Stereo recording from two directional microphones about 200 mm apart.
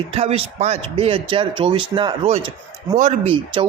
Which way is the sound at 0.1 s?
30° right (ahead or behind).